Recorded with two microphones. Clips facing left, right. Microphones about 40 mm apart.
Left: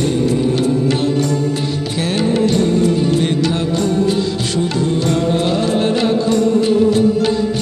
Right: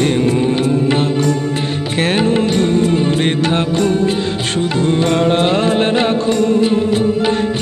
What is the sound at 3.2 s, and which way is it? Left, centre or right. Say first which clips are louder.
Music: right 1 dB; right.